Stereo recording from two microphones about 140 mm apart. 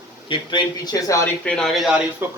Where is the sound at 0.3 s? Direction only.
30° left (ahead or behind).